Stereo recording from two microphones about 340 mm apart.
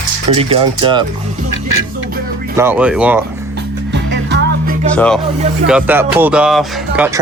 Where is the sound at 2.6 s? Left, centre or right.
Centre.